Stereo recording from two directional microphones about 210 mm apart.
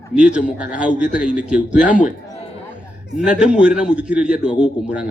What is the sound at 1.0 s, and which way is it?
Speech, 40° left (ahead or behind).